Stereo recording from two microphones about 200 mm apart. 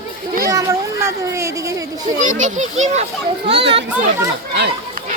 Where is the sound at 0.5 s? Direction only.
15° right (ahead or behind).